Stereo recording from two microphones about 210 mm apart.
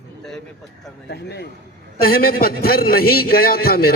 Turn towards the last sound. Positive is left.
turn(degrees=45)  # may be behind; listen again after turning